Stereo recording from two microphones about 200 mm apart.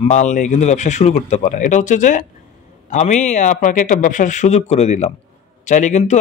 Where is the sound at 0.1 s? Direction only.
35° left (ahead or behind).